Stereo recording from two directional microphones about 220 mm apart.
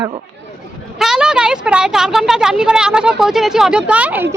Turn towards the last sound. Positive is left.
turn(degrees=-5)  # may be behind; listen again after turning